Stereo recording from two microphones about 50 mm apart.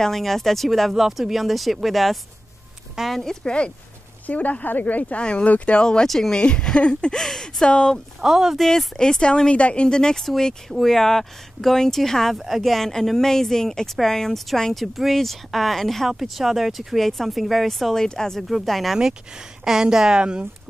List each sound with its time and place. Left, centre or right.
0.0 s speech: centre
3.2 s speech: centre
4.3 s speech: left
6.0 s speech: centre
6.3 s speech: centre
8.2 s speech: centre
8.5 s speech: centre
12.4 s speech: centre
12.7 s speech: centre
18.7 s speech: centre
18.9 s speech: centre